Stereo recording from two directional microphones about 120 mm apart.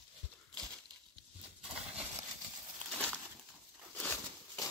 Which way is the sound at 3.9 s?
10° left (ahead or behind).